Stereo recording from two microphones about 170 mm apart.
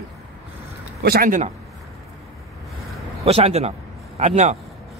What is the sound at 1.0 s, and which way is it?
Speech, 60° right (ahead or behind).